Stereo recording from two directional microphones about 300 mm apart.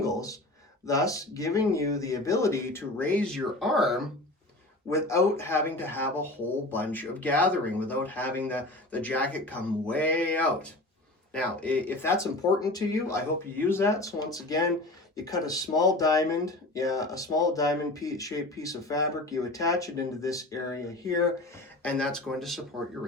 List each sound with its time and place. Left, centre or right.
0.0 s a sound: centre
0.9 s speech: centre
21.8 s speech: centre